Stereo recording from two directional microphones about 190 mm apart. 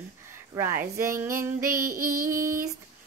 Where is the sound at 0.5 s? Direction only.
15° right (ahead or behind).